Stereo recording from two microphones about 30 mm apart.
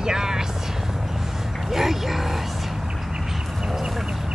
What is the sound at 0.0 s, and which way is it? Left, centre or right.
Vehicle, right.